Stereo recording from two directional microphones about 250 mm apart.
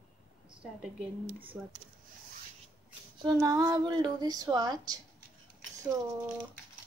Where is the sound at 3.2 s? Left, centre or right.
Centre.